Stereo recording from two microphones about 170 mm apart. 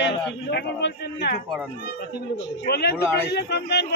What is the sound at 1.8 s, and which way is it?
A man's voice, 70° left (ahead or behind).